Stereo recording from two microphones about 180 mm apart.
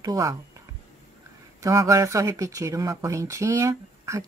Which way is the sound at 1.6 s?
20° right (ahead or behind).